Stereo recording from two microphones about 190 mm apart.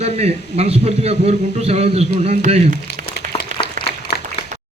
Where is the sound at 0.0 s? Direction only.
35° right (ahead or behind).